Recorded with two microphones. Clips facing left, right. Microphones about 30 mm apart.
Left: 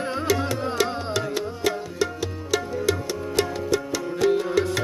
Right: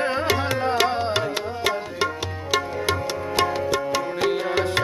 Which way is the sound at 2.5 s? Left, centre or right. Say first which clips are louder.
Right 1 dB; right.